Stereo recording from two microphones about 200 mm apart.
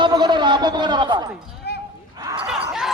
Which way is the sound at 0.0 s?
20° right (ahead or behind).